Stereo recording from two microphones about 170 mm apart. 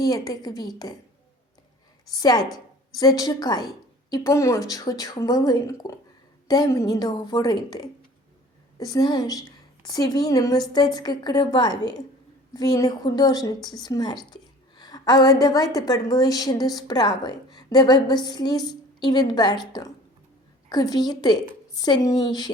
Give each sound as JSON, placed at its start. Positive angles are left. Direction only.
{"t": 0.0, "sound": "a woman's voice", "side_deg": 20}
{"t": 2.1, "sound": "a woman's voice", "side_deg": 20}